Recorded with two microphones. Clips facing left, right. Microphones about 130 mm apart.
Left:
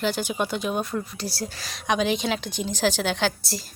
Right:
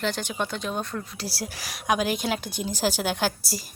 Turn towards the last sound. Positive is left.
turn(degrees=-5)  # may be behind; listen again after turning